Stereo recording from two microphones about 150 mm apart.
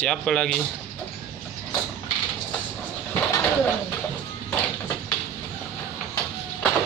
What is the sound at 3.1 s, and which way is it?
Bird, 15° left (ahead or behind).